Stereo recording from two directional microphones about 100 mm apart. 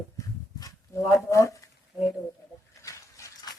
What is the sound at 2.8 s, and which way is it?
Dog, 35° left (ahead or behind).